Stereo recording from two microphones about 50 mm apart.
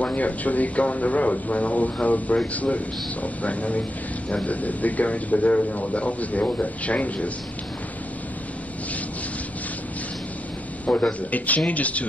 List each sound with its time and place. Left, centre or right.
0.0 s speech: left
10.9 s speech: left